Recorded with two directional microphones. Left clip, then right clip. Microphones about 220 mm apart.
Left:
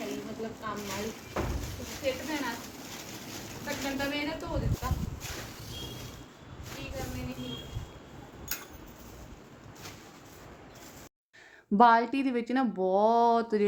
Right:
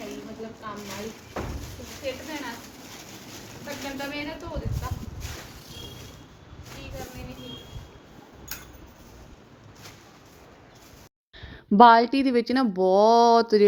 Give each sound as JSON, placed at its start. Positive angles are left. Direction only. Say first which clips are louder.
{"t": 0.6, "sound": "speech", "louder": "even", "side_deg": 0}
{"t": 8.5, "sound": "tick-tock", "louder": "left 1 dB", "side_deg": 0}
{"t": 11.8, "sound": "speech", "louder": "right 7 dB", "side_deg": -20}